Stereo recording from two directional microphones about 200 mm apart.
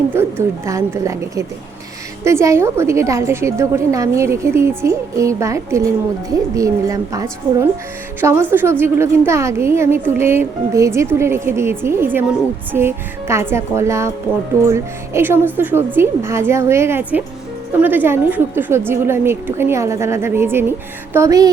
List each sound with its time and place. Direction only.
0.1 s a woman's voice: 10° right (ahead or behind)